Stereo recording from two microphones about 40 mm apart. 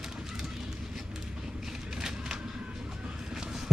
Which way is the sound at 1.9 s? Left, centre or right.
Centre.